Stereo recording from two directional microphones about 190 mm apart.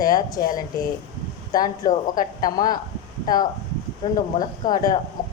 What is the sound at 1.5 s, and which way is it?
Speech, 20° left (ahead or behind).